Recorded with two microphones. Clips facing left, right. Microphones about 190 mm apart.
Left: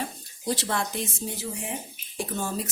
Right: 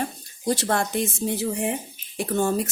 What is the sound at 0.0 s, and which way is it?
Speech, 45° right (ahead or behind).